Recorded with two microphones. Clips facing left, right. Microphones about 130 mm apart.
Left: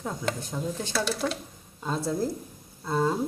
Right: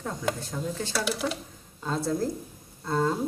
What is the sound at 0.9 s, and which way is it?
Speech, 10° right (ahead or behind).